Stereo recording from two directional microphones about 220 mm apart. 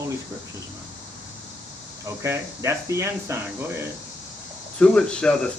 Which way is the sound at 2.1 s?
10° right (ahead or behind).